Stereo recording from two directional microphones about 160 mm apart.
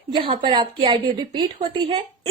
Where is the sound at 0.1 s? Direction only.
30° right (ahead or behind).